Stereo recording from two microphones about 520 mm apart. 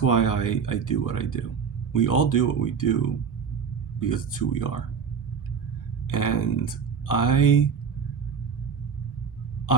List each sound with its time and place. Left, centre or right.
0.0 s speech: left
4.0 s speech: left
6.1 s speech: left